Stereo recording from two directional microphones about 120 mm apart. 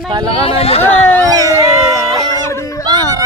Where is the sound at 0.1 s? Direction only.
35° right (ahead or behind).